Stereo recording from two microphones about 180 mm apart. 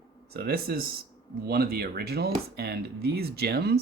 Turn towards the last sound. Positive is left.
turn(degrees=-60)  # may be behind; listen again after turning